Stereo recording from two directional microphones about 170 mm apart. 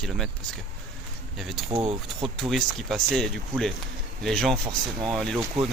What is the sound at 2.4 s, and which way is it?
Speech, centre (ahead or behind).